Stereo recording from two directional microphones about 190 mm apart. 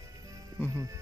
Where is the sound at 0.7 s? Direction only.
15° right (ahead or behind).